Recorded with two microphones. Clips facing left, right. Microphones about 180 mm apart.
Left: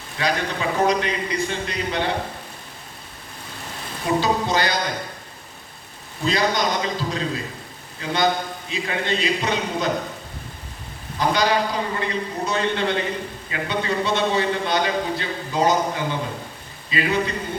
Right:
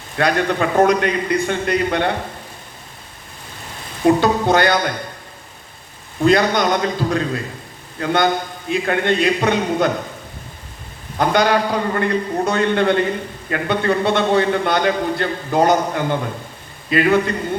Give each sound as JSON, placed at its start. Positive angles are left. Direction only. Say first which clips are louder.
{"t": 0.2, "sound": "a man's voice", "louder": "right 6 dB", "side_deg": -55}
{"t": 4.0, "sound": "a man's voice", "louder": "right 7 dB", "side_deg": -55}
{"t": 6.2, "sound": "a man's voice", "louder": "right 7 dB", "side_deg": -55}
{"t": 11.2, "sound": "a man's voice", "louder": "right 4 dB", "side_deg": -60}